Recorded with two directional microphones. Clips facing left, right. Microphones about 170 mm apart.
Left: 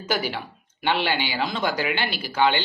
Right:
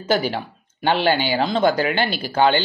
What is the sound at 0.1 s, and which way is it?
Speech, 30° right (ahead or behind).